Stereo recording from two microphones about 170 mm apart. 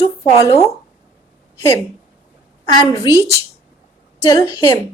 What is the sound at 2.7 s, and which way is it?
Speech, 30° left (ahead or behind).